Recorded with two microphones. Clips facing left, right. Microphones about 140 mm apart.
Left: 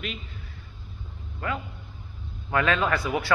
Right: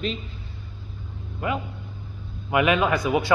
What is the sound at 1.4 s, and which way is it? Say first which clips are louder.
A man's voice: right 4 dB; 20° right (ahead or behind).